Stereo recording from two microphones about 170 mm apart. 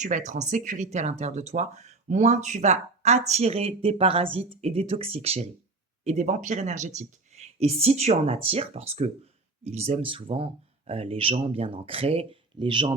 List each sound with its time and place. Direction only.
0.0 s speech: 45° right (ahead or behind); by 12.9 s 30° right (ahead or behind)